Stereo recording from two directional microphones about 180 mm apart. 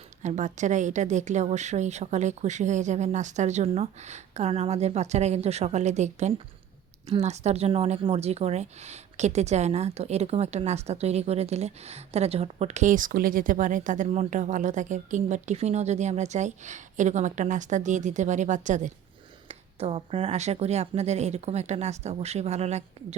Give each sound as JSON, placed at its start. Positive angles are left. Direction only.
{"t": 0.2, "sound": "speech", "side_deg": -40}